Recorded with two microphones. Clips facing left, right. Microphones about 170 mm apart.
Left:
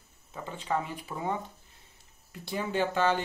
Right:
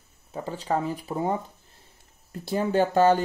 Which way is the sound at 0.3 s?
35° right (ahead or behind).